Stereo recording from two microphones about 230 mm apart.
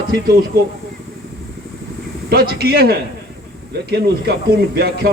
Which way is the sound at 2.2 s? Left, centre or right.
Right.